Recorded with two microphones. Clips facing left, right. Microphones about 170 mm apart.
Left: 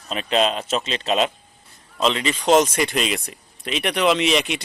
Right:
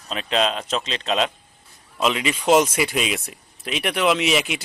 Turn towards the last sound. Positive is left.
turn(degrees=-5)  # may be behind; listen again after turning